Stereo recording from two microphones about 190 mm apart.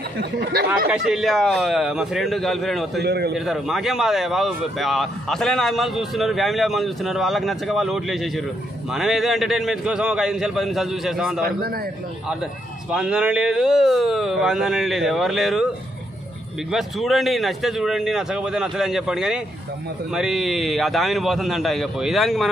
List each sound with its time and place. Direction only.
0.2 s speech: 60° right (ahead or behind)
0.7 s speech: 5° right (ahead or behind)
3.0 s speech: 60° right (ahead or behind)
3.3 s speech: centre (ahead or behind)
12.9 s speech: 5° right (ahead or behind)
16.7 s speech: centre (ahead or behind)